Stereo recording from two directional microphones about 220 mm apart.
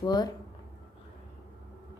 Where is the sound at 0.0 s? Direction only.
20° left (ahead or behind).